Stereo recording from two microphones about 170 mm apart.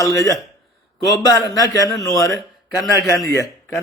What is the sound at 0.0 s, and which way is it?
A man's voice, 20° left (ahead or behind).